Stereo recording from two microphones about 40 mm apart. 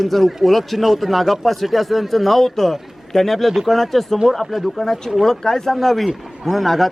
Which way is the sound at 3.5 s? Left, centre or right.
Centre.